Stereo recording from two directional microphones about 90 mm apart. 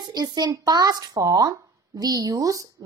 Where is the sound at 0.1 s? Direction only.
50° right (ahead or behind).